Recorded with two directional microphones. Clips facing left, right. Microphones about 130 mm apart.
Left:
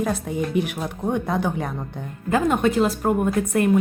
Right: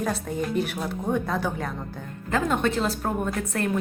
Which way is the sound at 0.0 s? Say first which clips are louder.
Left 3 dB; 10° left (ahead or behind).